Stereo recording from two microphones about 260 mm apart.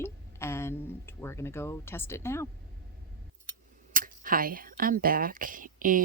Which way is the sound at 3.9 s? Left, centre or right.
Right.